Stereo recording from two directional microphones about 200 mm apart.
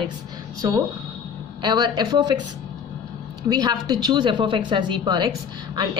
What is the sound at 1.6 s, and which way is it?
Speech, 20° right (ahead or behind).